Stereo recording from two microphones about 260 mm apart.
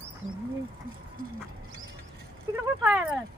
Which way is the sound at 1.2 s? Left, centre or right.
Right.